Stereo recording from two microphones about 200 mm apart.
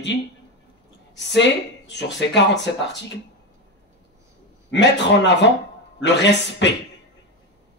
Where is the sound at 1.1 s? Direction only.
60° left (ahead or behind).